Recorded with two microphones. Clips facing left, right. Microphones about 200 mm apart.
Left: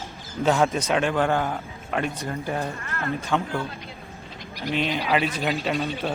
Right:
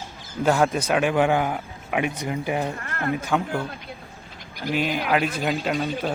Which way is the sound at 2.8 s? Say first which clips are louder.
Even; 50° right (ahead or behind).